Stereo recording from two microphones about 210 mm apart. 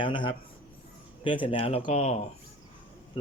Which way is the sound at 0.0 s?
20° left (ahead or behind).